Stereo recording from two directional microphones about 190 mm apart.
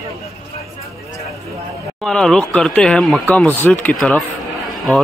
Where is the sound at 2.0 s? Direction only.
5° left (ahead or behind).